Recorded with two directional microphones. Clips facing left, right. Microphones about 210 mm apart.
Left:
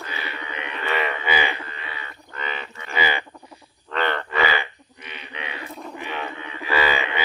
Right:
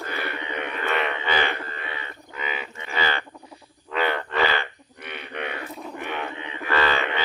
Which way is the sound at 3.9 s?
5° right (ahead or behind).